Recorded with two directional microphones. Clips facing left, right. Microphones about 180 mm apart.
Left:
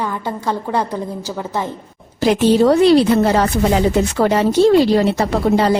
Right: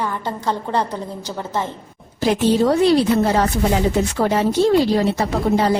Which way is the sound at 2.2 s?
85° left.